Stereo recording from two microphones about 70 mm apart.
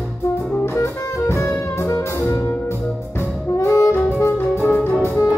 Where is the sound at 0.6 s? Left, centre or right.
Left.